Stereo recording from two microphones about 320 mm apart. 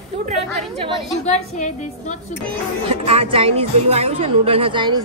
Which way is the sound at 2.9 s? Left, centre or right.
Centre.